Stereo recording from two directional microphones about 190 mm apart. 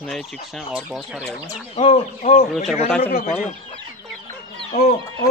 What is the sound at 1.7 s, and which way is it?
Speech, 30° left (ahead or behind).